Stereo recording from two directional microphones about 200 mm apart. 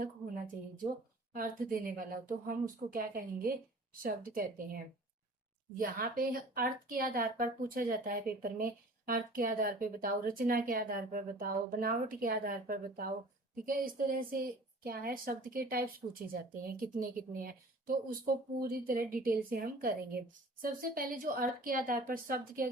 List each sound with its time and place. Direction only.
1.3 s speech: 45° right (ahead or behind)